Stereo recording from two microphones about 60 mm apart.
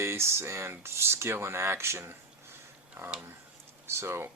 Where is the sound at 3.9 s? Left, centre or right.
Right.